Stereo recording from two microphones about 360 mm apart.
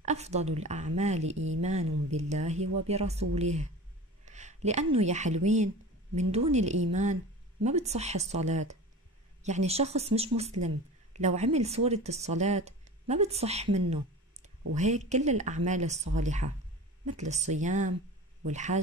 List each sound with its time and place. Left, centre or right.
0.0 s speech: centre
1.3 s speech: right
1.6 s speech: centre
4.3 s a sound: centre
4.9 s speech: centre
14.7 s speech: centre